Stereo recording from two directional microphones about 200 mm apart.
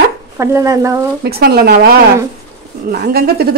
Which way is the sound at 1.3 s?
50° right (ahead or behind).